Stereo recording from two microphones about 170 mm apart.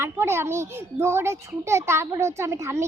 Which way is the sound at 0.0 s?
15° right (ahead or behind).